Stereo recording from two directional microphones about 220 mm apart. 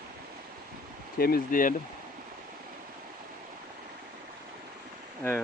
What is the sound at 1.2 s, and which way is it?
Speech, 45° left (ahead or behind).